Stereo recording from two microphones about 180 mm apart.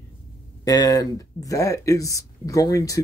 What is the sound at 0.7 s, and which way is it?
Speech, 20° left (ahead or behind).